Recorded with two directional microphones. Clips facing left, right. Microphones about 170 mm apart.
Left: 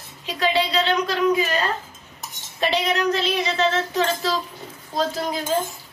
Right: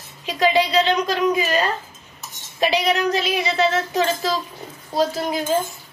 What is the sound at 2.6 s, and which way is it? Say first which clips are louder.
A woman's voice: right 2 dB; 10° right (ahead or behind).